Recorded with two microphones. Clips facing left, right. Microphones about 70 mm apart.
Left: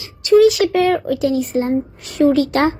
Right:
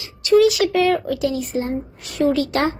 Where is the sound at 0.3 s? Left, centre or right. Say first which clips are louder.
Left 3 dB; left.